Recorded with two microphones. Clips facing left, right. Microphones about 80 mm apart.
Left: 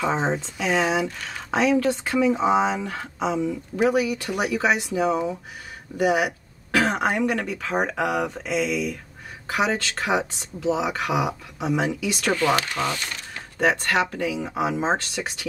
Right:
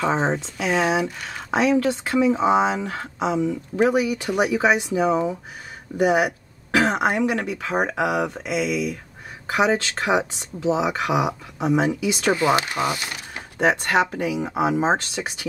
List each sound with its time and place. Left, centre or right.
0.0 s speech: centre
15.2 s speech: right